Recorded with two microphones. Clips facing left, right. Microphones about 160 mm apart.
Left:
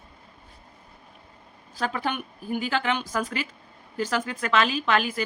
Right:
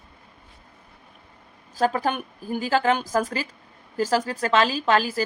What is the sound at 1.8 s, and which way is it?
Speech, 40° right (ahead or behind).